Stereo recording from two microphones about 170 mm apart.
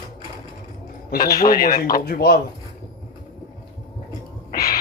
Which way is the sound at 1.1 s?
60° left (ahead or behind).